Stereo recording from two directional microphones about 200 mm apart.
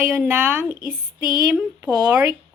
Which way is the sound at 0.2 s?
10° right (ahead or behind).